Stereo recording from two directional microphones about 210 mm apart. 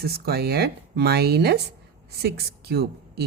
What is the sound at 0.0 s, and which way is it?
Speech, 50° right (ahead or behind).